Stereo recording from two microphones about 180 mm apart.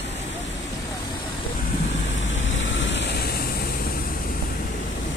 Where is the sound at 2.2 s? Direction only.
90° left; by 4.0 s 55° left (ahead or behind).